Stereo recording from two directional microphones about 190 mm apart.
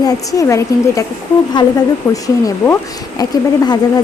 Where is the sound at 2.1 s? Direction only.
20° left (ahead or behind).